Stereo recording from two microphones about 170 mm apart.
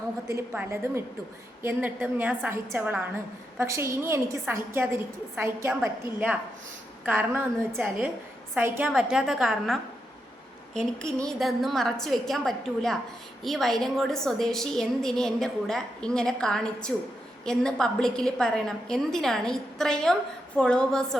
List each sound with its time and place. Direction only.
0.3 s a woman's voice: 15° right (ahead or behind)
8.9 s a woman's voice: centre (ahead or behind)